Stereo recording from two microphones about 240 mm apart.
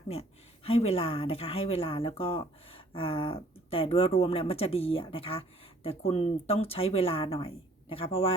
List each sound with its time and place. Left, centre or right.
0.1 s a woman's voice: left